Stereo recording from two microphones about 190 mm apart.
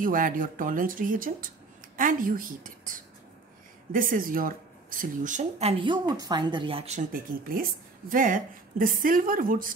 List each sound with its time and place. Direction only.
0.0 s speech: 45° right (ahead or behind)
7.1 s speech: 50° right (ahead or behind)